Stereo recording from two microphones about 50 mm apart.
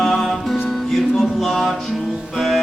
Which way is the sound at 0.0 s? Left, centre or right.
Centre.